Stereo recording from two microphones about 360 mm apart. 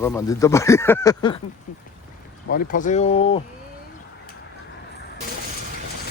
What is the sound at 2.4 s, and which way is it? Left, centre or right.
Speech, left.